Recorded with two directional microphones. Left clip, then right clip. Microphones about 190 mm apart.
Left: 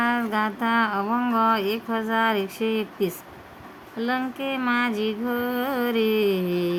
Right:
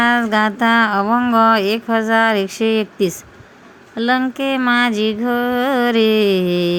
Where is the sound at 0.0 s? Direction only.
35° right (ahead or behind).